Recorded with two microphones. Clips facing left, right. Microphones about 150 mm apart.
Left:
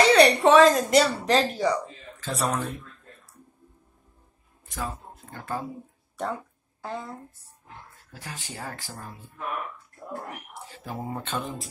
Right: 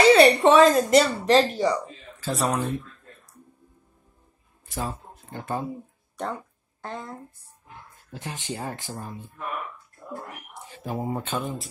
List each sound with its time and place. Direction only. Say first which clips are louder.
0.0 s speech: right 2 dB; centre (ahead or behind)
4.9 s speech: right 3 dB; 20° right (ahead or behind)
6.2 s speech: even; 5° left (ahead or behind)
7.9 s speech: right 6 dB; 20° right (ahead or behind)
10.5 s speech: right 4 dB; 15° right (ahead or behind)